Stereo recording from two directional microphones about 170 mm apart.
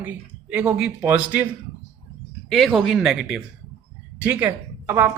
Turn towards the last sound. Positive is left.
turn(degrees=-15)  # may be behind; listen again after turning